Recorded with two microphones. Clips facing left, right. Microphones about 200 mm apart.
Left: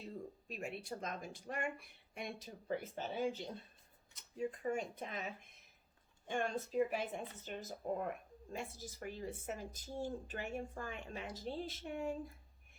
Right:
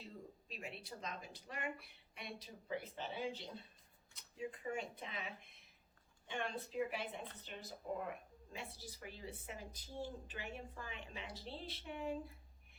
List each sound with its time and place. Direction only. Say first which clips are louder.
0.4 s a woman's voice: left 6 dB; 50° left (ahead or behind)